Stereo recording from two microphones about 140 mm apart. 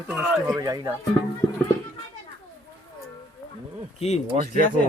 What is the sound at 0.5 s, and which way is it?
Speech, 25° right (ahead or behind).